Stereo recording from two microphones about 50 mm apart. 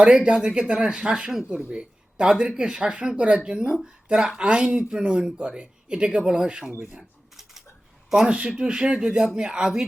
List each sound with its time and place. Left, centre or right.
0.0 s speech: centre
1.5 s speech: right
8.3 s speech: right